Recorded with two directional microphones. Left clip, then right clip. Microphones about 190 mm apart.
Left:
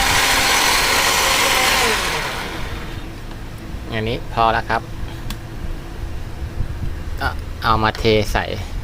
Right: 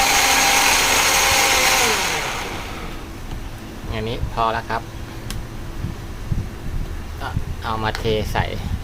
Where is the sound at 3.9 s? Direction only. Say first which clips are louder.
Left 4 dB; 15° left (ahead or behind).